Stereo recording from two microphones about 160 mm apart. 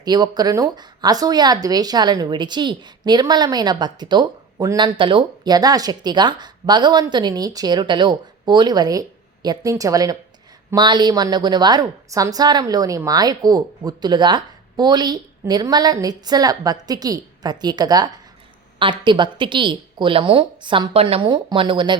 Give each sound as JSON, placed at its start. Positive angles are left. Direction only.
{"t": 0.0, "sound": "a woman's voice", "side_deg": -25}